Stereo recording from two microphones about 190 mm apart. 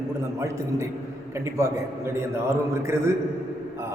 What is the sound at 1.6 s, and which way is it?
Speech, 15° right (ahead or behind).